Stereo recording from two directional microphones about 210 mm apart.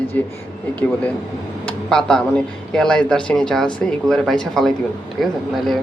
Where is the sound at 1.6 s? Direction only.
5° left (ahead or behind).